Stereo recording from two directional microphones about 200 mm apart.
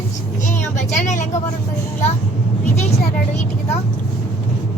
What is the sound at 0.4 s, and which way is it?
Vehicle, 35° left (ahead or behind).